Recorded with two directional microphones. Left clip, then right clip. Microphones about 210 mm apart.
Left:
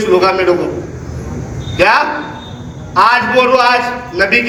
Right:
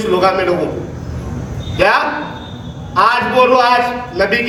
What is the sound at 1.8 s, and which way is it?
Speech, 20° left (ahead or behind).